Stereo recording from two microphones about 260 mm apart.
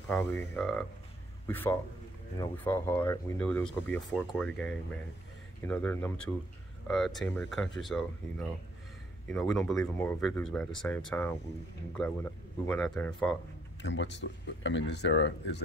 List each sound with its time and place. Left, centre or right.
0.1 s speech: centre
13.8 s speech: left